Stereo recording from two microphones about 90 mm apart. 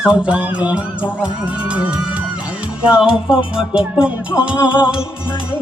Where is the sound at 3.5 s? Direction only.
10° right (ahead or behind).